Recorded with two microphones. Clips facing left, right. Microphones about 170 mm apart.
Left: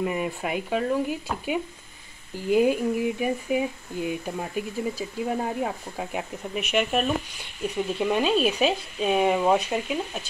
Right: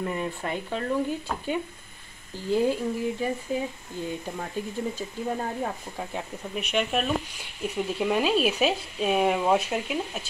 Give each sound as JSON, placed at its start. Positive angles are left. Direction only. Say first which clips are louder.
{"t": 0.0, "sound": "speech", "louder": "left 3 dB", "side_deg": 10}